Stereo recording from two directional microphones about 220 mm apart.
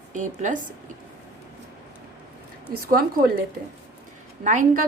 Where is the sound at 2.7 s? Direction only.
40° right (ahead or behind).